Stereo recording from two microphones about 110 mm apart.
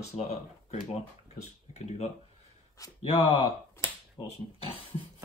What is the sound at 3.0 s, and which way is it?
Speech, 60° left (ahead or behind).